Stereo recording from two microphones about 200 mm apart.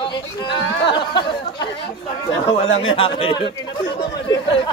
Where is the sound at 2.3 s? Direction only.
70° left (ahead or behind).